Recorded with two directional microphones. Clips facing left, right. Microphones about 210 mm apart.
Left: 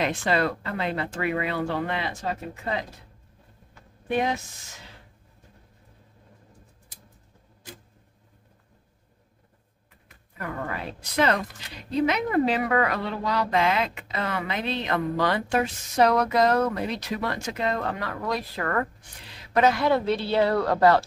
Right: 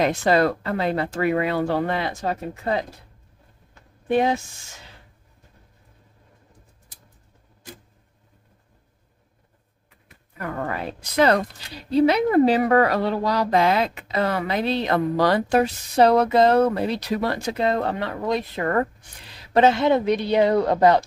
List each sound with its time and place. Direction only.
0.0 s speech: 40° right (ahead or behind)
4.1 s speech: 30° right (ahead or behind)
10.7 s a woman's voice: 40° right (ahead or behind); by 21.0 s 20° right (ahead or behind)